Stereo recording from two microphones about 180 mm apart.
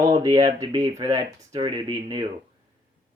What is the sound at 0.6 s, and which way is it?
Speech, 20° right (ahead or behind).